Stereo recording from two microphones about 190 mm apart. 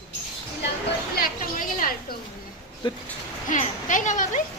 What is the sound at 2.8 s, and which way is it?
Speech, 25° left (ahead or behind).